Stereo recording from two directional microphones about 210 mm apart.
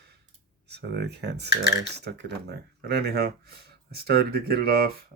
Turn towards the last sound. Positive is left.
turn(degrees=-50)  # may be behind; listen again after turning